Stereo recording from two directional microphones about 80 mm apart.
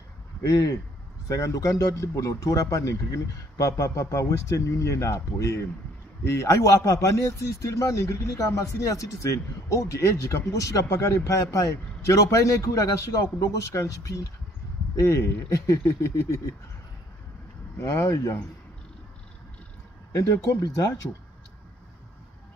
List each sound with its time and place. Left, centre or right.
0.4 s a man's voice: left
17.7 s a man's voice: left